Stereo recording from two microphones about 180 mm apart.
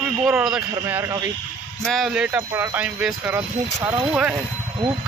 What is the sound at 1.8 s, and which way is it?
A man's voice, centre (ahead or behind).